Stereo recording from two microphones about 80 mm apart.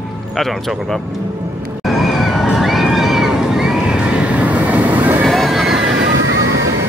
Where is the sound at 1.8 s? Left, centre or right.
Centre; by 5.2 s right.